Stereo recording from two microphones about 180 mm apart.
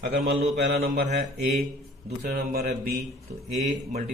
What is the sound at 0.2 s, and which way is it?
Speech, 60° right (ahead or behind).